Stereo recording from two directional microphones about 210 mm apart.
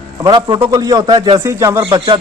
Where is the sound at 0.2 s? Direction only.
20° right (ahead or behind).